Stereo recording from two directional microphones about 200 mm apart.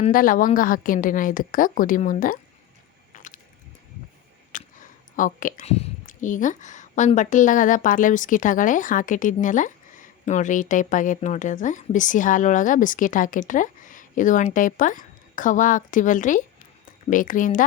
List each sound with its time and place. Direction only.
0.1 s a woman's voice: 45° left (ahead or behind)
3.1 s squish: 40° left (ahead or behind)
4.5 s speech: 40° left (ahead or behind)